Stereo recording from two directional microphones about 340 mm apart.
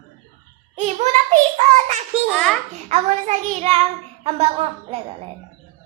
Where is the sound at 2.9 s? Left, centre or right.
Centre.